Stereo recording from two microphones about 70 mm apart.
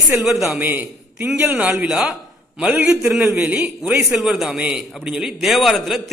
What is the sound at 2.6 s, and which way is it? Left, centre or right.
A man's voice, centre.